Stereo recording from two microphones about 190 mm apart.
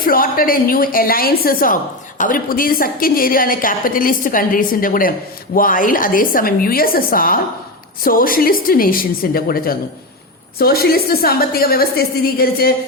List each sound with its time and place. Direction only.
0.0 s a woman's voice: 50° left (ahead or behind)